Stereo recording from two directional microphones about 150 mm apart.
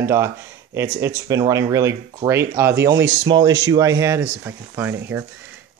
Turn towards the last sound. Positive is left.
turn(degrees=-15)  # may be behind; listen again after turning